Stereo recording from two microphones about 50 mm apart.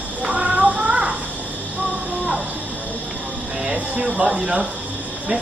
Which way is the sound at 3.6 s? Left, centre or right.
Right.